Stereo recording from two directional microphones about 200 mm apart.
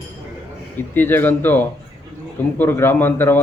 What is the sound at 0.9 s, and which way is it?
A man's voice, 10° left (ahead or behind).